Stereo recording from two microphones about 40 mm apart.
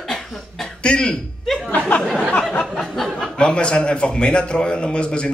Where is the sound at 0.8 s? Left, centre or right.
Left.